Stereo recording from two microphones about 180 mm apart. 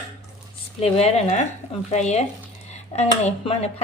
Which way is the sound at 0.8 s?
35° left (ahead or behind).